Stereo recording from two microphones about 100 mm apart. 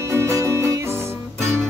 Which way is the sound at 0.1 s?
30° right (ahead or behind).